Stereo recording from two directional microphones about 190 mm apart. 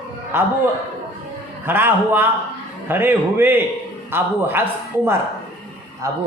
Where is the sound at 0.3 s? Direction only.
10° right (ahead or behind).